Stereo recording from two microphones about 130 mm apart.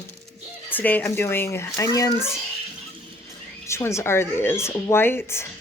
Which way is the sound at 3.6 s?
20° left (ahead or behind).